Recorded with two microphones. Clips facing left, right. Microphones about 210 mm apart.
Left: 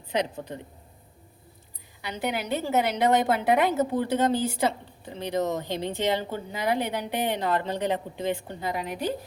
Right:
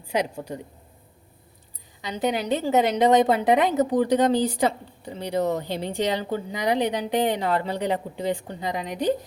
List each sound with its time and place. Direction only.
0.1 s a woman's voice: 10° right (ahead or behind)
2.0 s a woman's voice: 20° right (ahead or behind)